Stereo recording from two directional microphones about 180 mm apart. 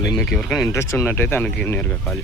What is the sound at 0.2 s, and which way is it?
Speech, 5° left (ahead or behind).